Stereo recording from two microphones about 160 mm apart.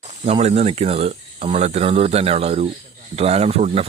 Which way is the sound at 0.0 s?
45° right (ahead or behind).